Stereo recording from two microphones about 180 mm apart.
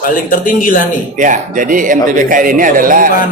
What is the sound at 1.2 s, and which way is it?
Speech, 45° right (ahead or behind).